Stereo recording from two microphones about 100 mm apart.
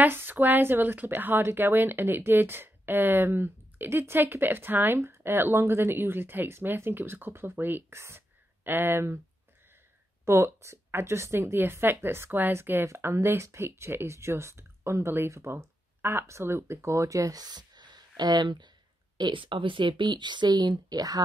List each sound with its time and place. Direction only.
0.0 s speech: 20° right (ahead or behind)
10.2 s speech: 30° right (ahead or behind); by 21.2 s 45° right (ahead or behind)